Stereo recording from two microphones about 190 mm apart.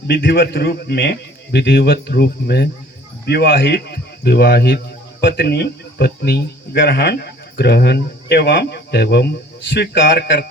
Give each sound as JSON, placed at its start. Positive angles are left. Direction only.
{"t": 0.1, "sound": "speech", "side_deg": 50}